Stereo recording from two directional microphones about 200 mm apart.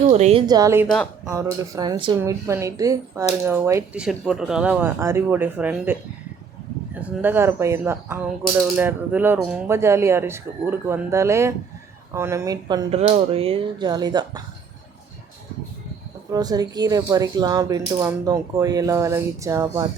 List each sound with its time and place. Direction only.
0.1 s speech: 30° right (ahead or behind)
0.4 s speech: 20° right (ahead or behind)
0.9 s speech: 5° left (ahead or behind)
1.3 s speech: 15° right (ahead or behind)
13.0 s speech: 30° right (ahead or behind)
16.3 s speech: 20° right (ahead or behind)